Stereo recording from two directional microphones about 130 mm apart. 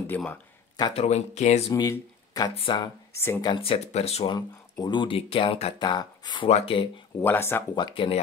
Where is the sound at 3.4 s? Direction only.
40° left (ahead or behind).